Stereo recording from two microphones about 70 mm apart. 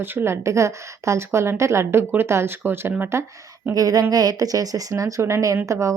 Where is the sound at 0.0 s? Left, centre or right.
Right.